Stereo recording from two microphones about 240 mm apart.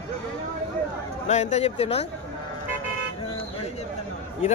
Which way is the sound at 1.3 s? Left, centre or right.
Left.